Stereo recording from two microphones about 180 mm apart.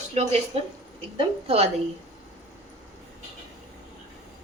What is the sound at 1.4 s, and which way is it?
Speech, 35° right (ahead or behind).